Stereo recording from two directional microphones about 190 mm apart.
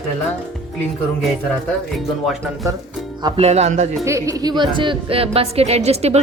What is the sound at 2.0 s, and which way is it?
Speech, centre (ahead or behind).